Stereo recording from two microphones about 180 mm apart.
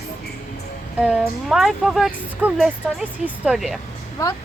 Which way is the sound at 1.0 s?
5° right (ahead or behind).